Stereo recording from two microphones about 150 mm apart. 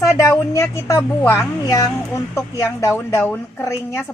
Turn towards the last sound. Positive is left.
turn(degrees=15)  # may be behind; listen again after turning